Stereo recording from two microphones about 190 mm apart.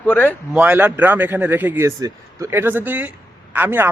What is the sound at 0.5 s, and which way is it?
A man's voice, 10° right (ahead or behind).